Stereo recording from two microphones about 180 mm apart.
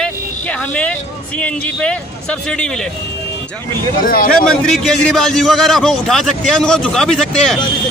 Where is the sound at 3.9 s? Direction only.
50° left (ahead or behind).